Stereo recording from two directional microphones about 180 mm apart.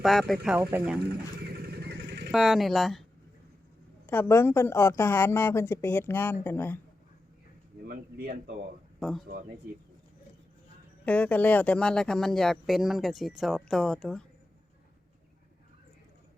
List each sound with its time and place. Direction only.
0.0 s speech: centre (ahead or behind)
1.6 s vehicle: 60° right (ahead or behind)
2.3 s speech: centre (ahead or behind)
4.0 s a woman's voice: 10° left (ahead or behind)
7.9 s speech: 60° right (ahead or behind)
9.0 s speech: centre (ahead or behind)
11.0 s speech: 10° left (ahead or behind)